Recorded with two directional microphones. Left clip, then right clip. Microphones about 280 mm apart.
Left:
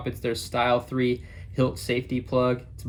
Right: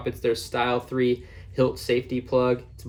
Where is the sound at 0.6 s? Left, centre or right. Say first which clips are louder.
Left 2 dB; centre.